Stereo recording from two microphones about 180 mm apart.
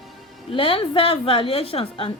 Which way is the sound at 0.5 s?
30° left (ahead or behind).